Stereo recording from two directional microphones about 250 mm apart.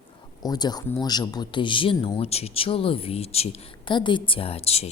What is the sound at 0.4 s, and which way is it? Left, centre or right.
A woman's voice, centre.